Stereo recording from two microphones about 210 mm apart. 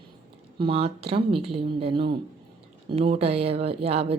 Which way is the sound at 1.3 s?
Centre (ahead or behind).